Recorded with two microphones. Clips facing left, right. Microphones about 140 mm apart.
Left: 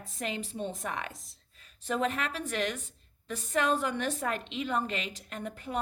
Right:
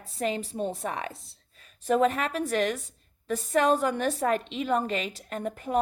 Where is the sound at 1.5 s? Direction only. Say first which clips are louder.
Right 8 dB; 45° right (ahead or behind).